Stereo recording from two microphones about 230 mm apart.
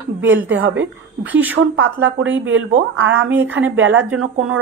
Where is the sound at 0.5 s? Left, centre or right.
Right.